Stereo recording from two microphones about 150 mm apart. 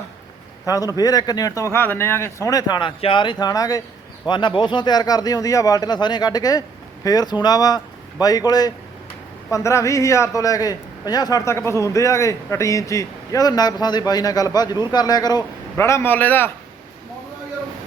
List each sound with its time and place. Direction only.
0.7 s a man's voice: 25° left (ahead or behind)
3.4 s a man's voice: 25° left (ahead or behind)